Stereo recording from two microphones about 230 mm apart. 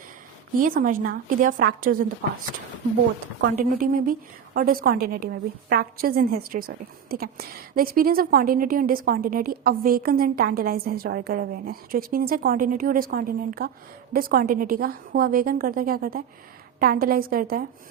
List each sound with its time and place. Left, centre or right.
0.6 s a woman's voice: right
3.5 s a woman's voice: right